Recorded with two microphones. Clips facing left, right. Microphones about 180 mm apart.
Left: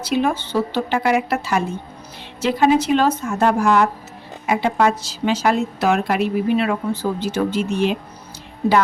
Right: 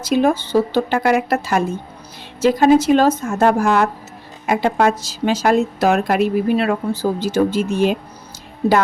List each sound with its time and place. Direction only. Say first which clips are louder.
0.0 s a woman's voice: right 4 dB; 40° right (ahead or behind)